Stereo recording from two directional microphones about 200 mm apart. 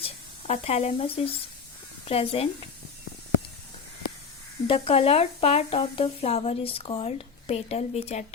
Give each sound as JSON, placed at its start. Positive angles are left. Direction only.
{"t": 0.0, "sound": "speech", "side_deg": 30}
{"t": 4.6, "sound": "speech", "side_deg": 30}